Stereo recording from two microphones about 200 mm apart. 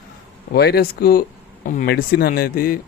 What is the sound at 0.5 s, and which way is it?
Speech, 50° left (ahead or behind).